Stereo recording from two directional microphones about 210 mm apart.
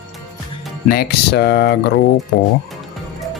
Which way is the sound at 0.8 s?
45° left (ahead or behind).